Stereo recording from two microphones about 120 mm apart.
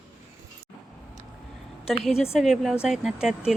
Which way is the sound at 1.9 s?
5° right (ahead or behind).